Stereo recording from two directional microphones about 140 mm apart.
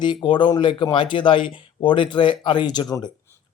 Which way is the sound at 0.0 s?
35° left (ahead or behind).